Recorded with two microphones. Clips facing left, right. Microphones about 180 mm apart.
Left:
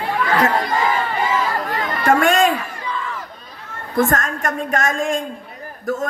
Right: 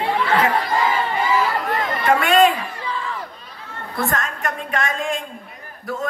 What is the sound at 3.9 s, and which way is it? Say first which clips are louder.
A woman's voice: left 6 dB; 45° left (ahead or behind).